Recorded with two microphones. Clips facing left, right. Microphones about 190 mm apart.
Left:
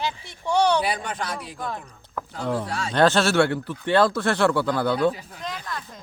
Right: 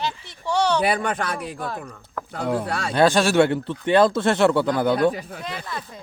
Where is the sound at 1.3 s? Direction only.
5° right (ahead or behind).